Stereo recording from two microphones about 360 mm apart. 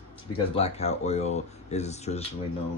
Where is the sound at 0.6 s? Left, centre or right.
Centre.